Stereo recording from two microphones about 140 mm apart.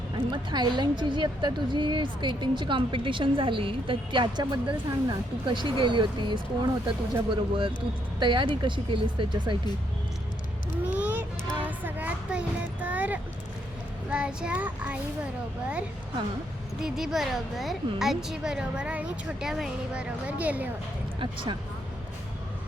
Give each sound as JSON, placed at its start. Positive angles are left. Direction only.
{"t": 0.3, "sound": "a woman's voice", "side_deg": -30}
{"t": 10.9, "sound": "vehicle", "side_deg": -10}
{"t": 11.6, "sound": "music", "side_deg": -10}
{"t": 14.1, "sound": "child singing", "side_deg": -5}
{"t": 16.8, "sound": "a woman's voice", "side_deg": -5}
{"t": 21.2, "sound": "a woman's voice", "side_deg": -35}